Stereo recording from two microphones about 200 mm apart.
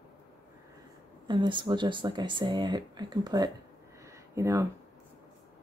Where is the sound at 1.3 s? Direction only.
25° right (ahead or behind).